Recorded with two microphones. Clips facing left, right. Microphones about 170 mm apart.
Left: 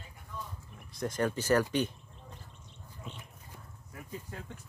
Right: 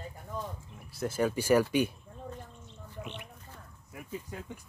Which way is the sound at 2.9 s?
75° right (ahead or behind).